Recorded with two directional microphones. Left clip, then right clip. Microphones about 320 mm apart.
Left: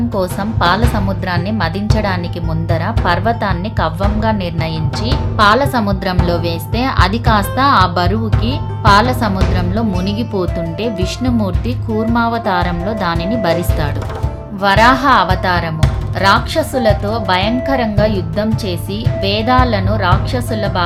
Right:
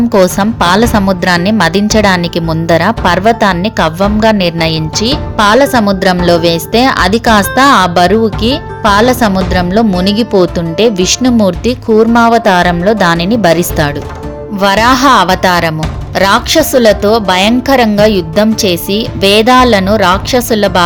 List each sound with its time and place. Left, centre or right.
0.1 s a woman's voice: right